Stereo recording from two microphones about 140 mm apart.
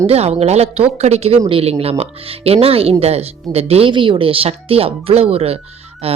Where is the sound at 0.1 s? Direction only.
50° right (ahead or behind).